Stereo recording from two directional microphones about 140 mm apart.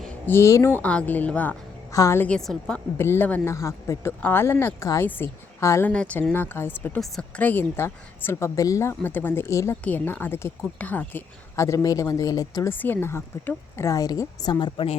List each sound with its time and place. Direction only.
0.3 s speech: 20° left (ahead or behind)
0.8 s speech: 10° left (ahead or behind)
1.9 s a woman's voice: 20° left (ahead or behind)
2.2 s a woman's voice: 5° left (ahead or behind)
3.0 s speech: 15° left (ahead or behind)
5.9 s speech: 10° left (ahead or behind); by 12.7 s 25° left (ahead or behind)
12.7 s speech: 15° left (ahead or behind); by 14.8 s 30° left (ahead or behind)